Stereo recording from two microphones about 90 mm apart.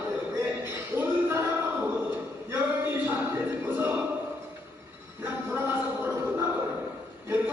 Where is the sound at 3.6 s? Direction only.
20° right (ahead or behind).